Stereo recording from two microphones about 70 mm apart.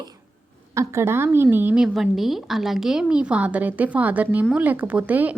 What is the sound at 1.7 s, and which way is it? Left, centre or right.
A woman's voice, centre.